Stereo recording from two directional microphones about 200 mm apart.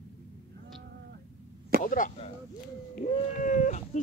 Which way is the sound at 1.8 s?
40° left (ahead or behind).